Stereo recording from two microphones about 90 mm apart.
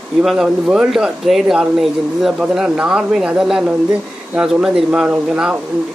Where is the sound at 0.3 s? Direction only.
5° right (ahead or behind).